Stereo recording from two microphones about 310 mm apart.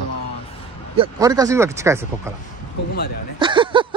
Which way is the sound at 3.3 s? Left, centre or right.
Centre.